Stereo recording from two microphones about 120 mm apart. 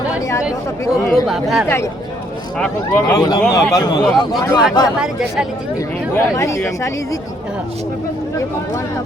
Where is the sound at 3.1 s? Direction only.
30° left (ahead or behind).